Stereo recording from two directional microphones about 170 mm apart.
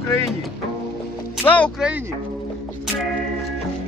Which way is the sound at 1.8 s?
10° right (ahead or behind).